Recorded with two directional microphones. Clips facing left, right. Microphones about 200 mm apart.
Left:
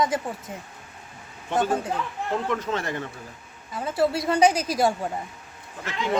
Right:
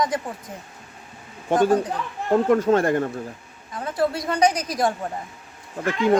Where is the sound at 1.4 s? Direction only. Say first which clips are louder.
Right 6 dB; 50° right (ahead or behind).